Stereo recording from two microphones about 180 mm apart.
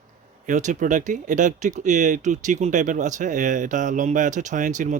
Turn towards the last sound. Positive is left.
turn(degrees=-45)  # may be behind; listen again after turning